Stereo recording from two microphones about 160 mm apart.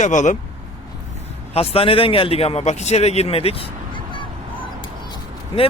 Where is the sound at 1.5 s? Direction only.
35° left (ahead or behind).